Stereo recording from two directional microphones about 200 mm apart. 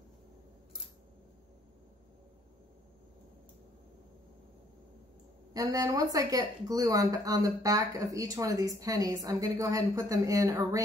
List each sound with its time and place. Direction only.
5.5 s speech: 20° right (ahead or behind)